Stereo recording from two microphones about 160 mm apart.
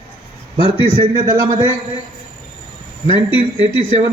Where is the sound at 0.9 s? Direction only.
25° right (ahead or behind).